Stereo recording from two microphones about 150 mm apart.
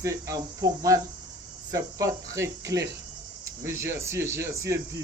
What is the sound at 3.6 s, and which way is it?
Speech, 20° right (ahead or behind).